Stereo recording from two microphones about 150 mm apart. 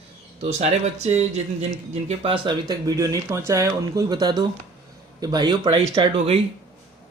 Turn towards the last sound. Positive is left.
turn(degrees=-40)  # may be behind; listen again after turning